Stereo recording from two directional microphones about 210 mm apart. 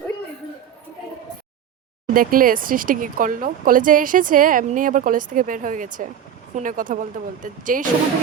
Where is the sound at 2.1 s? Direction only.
40° right (ahead or behind).